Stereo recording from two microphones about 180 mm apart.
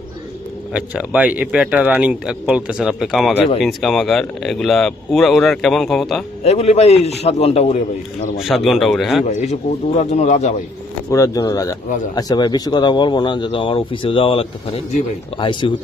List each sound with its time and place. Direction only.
0.7 s speech: 5° right (ahead or behind)
6.4 s a man's voice: 35° left (ahead or behind)
8.4 s speech: centre (ahead or behind)
9.2 s a man's voice: 40° left (ahead or behind)
11.1 s speech: 15° left (ahead or behind)